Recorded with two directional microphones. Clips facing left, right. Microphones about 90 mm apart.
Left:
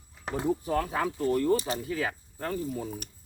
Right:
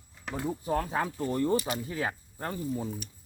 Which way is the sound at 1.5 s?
30° left (ahead or behind).